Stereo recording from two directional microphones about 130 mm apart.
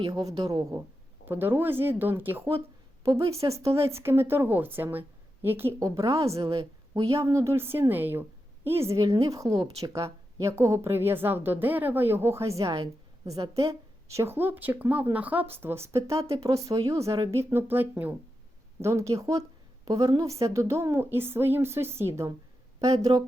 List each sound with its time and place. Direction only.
0.1 s a woman's voice: 25° right (ahead or behind)
1.3 s a woman's voice: 15° right (ahead or behind)
13.5 s a woman's voice: 50° right (ahead or behind)
14.1 s a woman's voice: 20° right (ahead or behind)
23.1 s a woman's voice: 40° right (ahead or behind)